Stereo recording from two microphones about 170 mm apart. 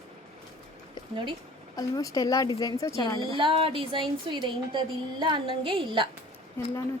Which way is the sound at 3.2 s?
30° right (ahead or behind).